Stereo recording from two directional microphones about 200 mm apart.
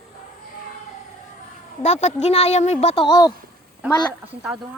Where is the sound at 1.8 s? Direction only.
35° left (ahead or behind); by 3.3 s 20° left (ahead or behind).